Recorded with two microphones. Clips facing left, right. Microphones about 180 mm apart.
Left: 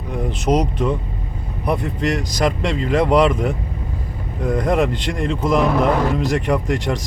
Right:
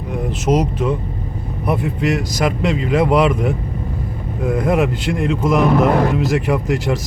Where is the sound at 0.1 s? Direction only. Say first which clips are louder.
Right 1 dB; centre (ahead or behind).